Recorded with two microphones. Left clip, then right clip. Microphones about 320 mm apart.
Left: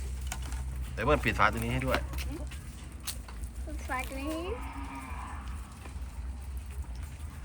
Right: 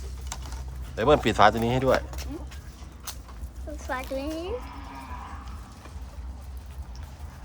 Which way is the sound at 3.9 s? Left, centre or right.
Right.